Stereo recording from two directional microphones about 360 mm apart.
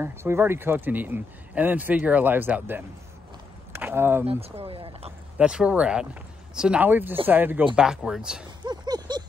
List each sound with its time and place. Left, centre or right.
0.0 s speech: centre
5.4 s speech: centre